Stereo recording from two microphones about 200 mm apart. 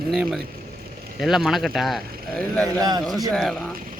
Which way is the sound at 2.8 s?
20° right (ahead or behind).